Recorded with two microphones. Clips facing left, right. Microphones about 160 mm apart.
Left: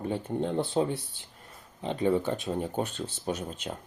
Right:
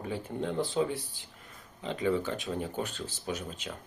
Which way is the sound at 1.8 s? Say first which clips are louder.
Left 3 dB; 35° left (ahead or behind).